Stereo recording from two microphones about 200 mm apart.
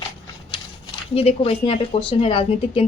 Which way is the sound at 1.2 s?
30° left (ahead or behind).